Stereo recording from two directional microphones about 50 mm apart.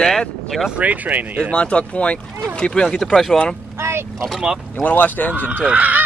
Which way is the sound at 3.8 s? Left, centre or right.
Right.